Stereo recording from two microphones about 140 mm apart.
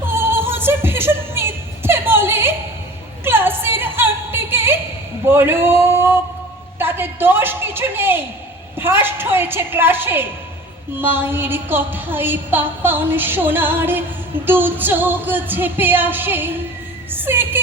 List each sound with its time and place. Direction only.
0.0 s music: 15° right (ahead or behind)
5.3 s a woman's voice: 15° right (ahead or behind)
17.1 s music: 15° right (ahead or behind)